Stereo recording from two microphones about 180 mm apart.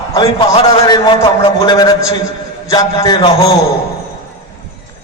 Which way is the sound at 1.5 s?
20° left (ahead or behind).